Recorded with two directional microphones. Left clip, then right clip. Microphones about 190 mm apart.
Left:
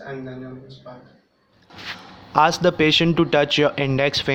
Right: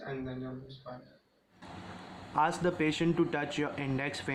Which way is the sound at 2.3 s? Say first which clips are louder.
Left 13 dB; 35° left (ahead or behind).